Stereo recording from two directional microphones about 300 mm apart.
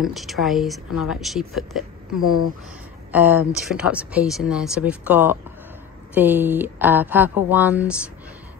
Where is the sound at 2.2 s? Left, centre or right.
Left.